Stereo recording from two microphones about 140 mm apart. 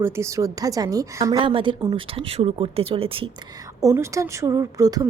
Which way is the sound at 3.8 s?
20° right (ahead or behind).